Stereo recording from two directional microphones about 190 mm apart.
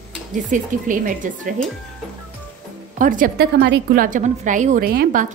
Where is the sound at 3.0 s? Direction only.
45° right (ahead or behind).